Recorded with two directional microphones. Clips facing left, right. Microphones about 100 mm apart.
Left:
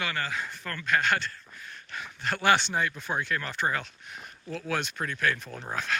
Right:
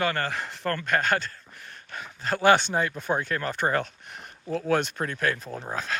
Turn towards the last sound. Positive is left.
turn(degrees=-35)  # may be behind; listen again after turning